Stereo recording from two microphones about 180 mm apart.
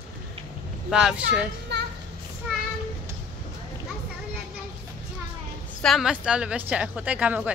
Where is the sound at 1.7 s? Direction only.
70° right (ahead or behind).